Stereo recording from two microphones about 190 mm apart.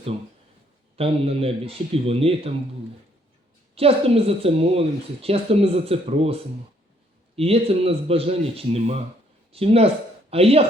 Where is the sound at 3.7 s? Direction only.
30° right (ahead or behind).